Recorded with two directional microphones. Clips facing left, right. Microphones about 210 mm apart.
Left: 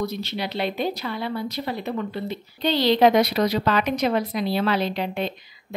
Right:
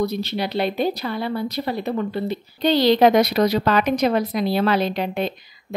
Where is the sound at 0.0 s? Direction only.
35° right (ahead or behind).